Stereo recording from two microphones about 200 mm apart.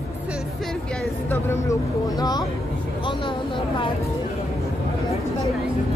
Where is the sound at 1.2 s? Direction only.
10° left (ahead or behind).